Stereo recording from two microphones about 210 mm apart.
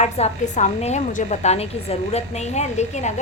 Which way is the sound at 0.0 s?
35° left (ahead or behind).